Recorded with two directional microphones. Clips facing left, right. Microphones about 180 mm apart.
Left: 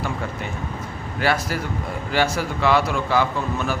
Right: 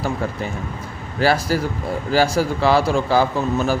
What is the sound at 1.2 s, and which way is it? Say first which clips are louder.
Speech: right 5 dB; 35° right (ahead or behind).